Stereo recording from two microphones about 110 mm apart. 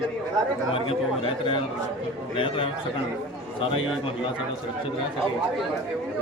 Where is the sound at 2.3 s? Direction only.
55° left (ahead or behind).